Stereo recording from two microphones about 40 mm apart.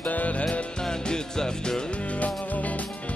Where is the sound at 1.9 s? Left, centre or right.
Left.